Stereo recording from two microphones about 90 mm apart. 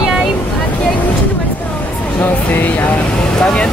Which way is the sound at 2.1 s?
20° left (ahead or behind).